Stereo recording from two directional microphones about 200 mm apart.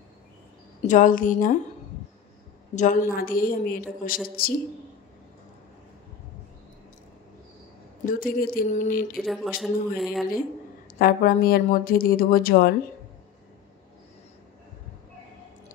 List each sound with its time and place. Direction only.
0.8 s a woman's voice: 40° left (ahead or behind)
2.7 s a woman's voice: 35° left (ahead or behind)
8.0 s speech: 45° left (ahead or behind)
9.1 s speech: centre (ahead or behind)
10.9 s speech: 45° left (ahead or behind)